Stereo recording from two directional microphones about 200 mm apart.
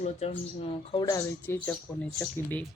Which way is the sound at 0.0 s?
30° left (ahead or behind).